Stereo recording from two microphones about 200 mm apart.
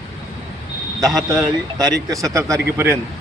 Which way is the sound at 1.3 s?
15° right (ahead or behind).